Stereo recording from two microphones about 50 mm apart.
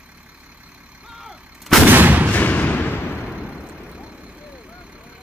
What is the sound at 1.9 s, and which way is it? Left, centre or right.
Artillery fire, right.